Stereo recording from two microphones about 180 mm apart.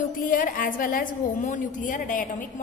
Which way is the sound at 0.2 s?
50° left (ahead or behind).